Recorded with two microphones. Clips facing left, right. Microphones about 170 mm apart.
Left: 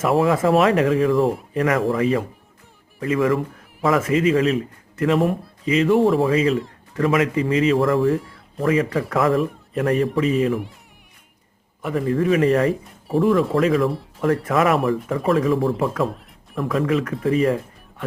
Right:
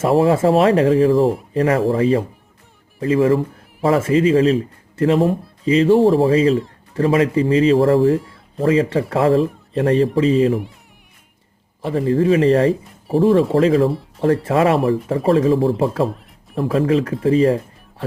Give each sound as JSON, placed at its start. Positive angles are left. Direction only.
{"t": 0.0, "sound": "speech", "side_deg": -30}
{"t": 1.2, "sound": "speech", "side_deg": 0}
{"t": 1.5, "sound": "speech", "side_deg": -30}
{"t": 11.8, "sound": "speech", "side_deg": -30}
{"t": 16.0, "sound": "music", "side_deg": 0}
{"t": 16.6, "sound": "speech", "side_deg": -30}